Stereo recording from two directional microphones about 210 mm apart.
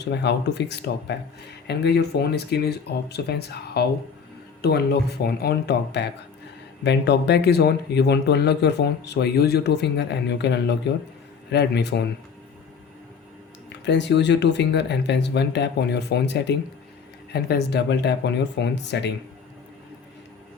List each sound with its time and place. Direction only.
0.0 s speech: 55° left (ahead or behind)
13.8 s speech: 55° left (ahead or behind)